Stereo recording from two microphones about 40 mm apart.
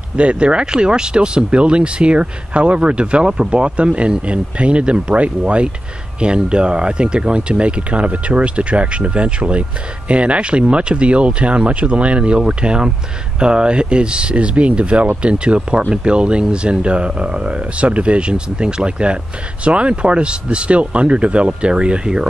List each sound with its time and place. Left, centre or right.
0.1 s speech: right